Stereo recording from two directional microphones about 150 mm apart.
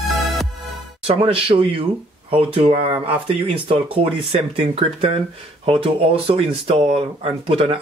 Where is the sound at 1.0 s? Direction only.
40° right (ahead or behind).